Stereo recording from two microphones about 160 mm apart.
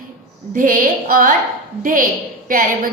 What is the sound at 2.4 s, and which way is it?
Speech, 60° right (ahead or behind).